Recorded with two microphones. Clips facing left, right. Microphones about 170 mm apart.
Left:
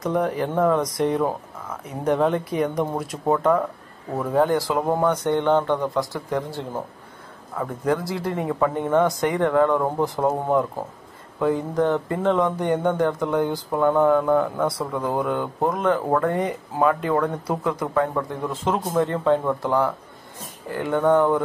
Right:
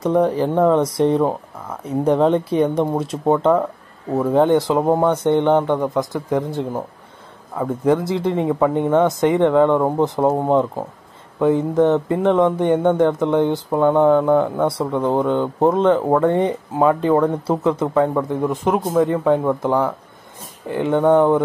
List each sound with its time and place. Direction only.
0.0 s speech: 30° right (ahead or behind)